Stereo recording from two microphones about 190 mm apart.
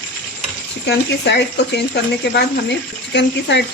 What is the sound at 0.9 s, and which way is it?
Speech, 60° left (ahead or behind).